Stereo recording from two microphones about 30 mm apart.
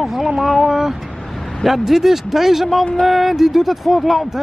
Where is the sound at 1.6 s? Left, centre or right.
Centre.